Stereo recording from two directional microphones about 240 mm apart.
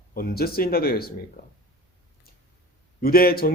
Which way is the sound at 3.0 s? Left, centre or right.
Left.